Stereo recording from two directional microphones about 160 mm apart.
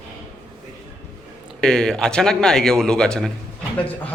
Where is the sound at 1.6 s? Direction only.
5° left (ahead or behind).